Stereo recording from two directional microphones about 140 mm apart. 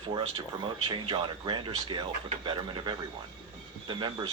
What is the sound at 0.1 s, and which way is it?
Speech, 40° right (ahead or behind).